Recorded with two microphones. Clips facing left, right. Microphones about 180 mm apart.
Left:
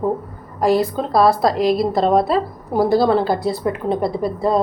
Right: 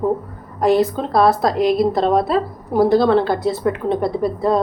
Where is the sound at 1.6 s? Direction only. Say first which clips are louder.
Right 1 dB; 35° left (ahead or behind).